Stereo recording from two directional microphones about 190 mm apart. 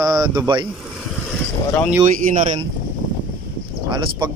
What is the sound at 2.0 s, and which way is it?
Speech, 40° right (ahead or behind).